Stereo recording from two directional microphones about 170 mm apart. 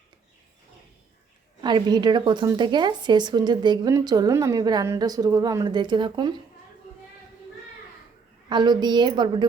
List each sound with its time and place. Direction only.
1.6 s a woman's voice: 25° right (ahead or behind)
8.4 s a woman's voice: 25° right (ahead or behind)